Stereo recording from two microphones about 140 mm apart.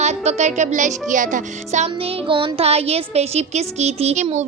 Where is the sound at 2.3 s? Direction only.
40° right (ahead or behind).